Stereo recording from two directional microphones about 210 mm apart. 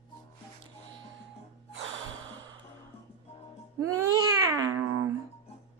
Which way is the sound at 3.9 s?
15° right (ahead or behind).